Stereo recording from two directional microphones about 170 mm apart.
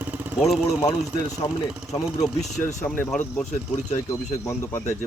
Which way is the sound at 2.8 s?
10° left (ahead or behind).